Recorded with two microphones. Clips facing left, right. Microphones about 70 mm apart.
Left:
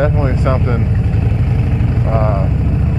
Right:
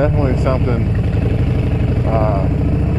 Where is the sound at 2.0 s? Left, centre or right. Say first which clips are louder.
Even; centre.